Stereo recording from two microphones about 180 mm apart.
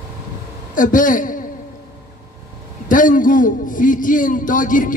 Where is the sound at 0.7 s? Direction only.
45° left (ahead or behind).